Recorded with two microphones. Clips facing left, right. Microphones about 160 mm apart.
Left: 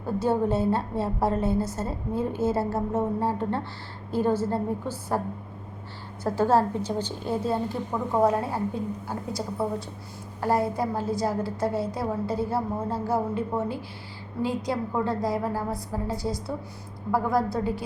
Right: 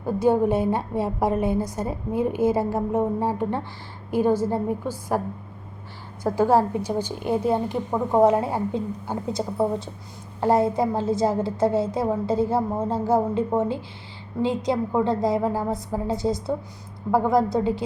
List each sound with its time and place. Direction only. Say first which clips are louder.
0.0 s a woman's voice: right 5 dB; 15° right (ahead or behind)
6.2 s a woman's voice: right 3 dB; 15° right (ahead or behind)